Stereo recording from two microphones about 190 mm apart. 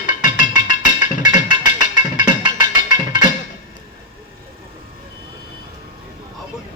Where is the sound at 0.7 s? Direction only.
45° left (ahead or behind).